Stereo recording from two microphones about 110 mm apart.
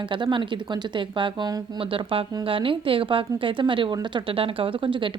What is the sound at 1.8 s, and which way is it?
Speech, 55° right (ahead or behind).